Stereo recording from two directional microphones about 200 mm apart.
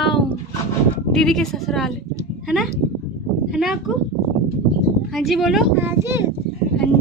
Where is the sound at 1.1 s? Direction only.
Centre (ahead or behind).